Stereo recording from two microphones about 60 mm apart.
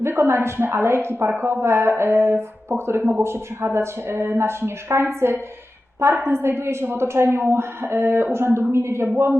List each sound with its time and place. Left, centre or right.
0.0 s a woman's voice: right